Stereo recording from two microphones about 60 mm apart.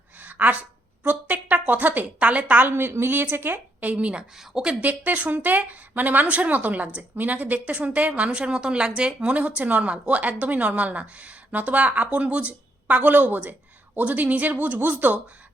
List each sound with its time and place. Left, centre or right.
0.2 s a sound: right
1.0 s a woman's voice: right
4.8 s a woman's voice: right